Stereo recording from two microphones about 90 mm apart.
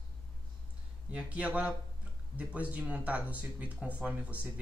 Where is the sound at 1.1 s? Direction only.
15° right (ahead or behind).